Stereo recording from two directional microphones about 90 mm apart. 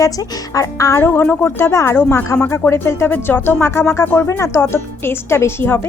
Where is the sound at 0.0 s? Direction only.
40° left (ahead or behind).